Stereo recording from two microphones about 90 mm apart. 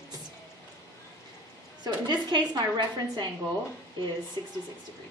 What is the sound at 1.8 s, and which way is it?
A woman's voice, 50° right (ahead or behind).